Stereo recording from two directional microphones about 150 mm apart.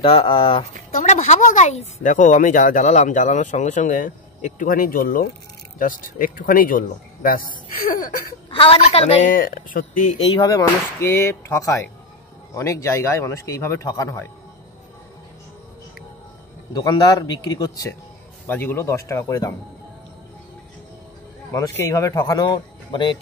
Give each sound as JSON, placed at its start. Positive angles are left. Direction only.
{"t": 0.0, "sound": "speech", "side_deg": 40}
{"t": 0.9, "sound": "speech", "side_deg": 50}
{"t": 8.5, "sound": "a woman's voice", "side_deg": 35}
{"t": 9.3, "sound": "speech", "side_deg": 70}
{"t": 10.2, "sound": "a man's voice", "side_deg": 25}
{"t": 16.7, "sound": "a man's voice", "side_deg": 25}
{"t": 21.5, "sound": "a man's voice", "side_deg": 20}